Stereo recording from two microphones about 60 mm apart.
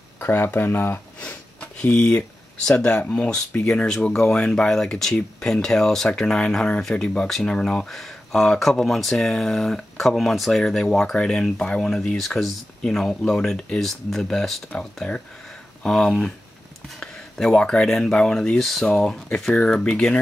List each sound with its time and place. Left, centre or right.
0.2 s speech: left
1.2 s sniff: centre
2.7 s speech: left
7.9 s speech: centre
15.8 s speech: centre